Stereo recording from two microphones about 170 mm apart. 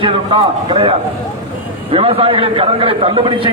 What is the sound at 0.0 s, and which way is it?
A man's voice, 30° right (ahead or behind).